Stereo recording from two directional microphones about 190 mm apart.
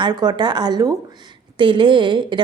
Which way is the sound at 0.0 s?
20° right (ahead or behind).